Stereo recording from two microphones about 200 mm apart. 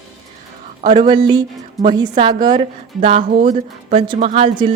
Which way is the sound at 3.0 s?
35° right (ahead or behind).